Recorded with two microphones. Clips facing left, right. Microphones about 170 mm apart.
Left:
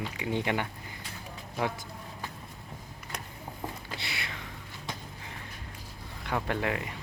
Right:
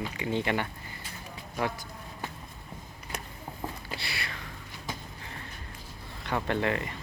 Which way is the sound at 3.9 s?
20° left (ahead or behind).